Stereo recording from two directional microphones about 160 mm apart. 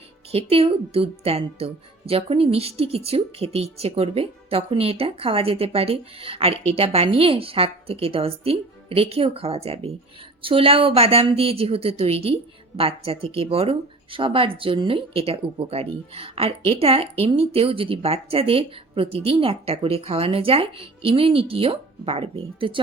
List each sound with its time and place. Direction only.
0.3 s speech: 40° right (ahead or behind)